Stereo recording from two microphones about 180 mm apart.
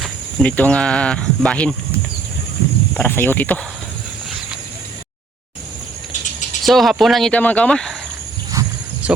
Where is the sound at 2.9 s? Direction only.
10° left (ahead or behind).